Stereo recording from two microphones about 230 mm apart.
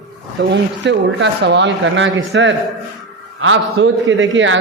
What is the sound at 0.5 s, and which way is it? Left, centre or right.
A man's voice, right.